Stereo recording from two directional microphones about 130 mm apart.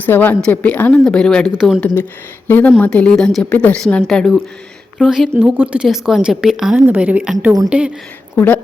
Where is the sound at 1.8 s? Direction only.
15° left (ahead or behind); by 7.9 s 10° right (ahead or behind).